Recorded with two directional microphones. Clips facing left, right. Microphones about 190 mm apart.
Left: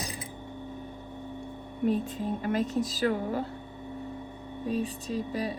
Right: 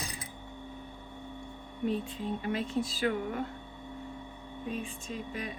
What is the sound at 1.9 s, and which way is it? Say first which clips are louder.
Speech: left 4 dB; 45° left (ahead or behind).